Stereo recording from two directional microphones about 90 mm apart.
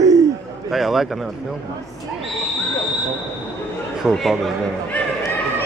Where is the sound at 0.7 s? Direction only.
5° right (ahead or behind).